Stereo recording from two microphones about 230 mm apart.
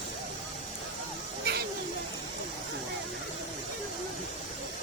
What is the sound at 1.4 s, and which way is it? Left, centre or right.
Snake, right.